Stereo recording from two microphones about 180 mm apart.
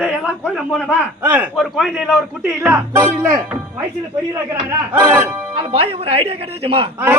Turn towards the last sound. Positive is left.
turn(degrees=-35)  # may be behind; listen again after turning